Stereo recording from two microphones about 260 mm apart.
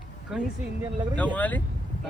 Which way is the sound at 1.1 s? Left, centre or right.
Centre.